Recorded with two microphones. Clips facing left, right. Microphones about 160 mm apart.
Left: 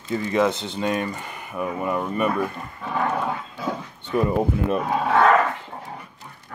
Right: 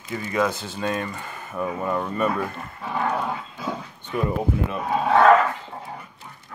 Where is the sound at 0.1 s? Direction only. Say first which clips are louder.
Left 3 dB; 25° left (ahead or behind).